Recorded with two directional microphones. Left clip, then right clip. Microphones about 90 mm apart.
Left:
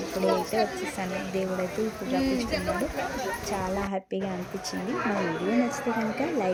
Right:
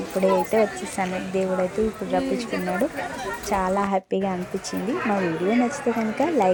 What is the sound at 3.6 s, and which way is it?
Speech, 30° right (ahead or behind).